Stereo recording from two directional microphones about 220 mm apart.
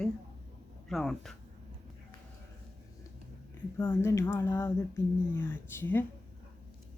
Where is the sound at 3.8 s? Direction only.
10° left (ahead or behind).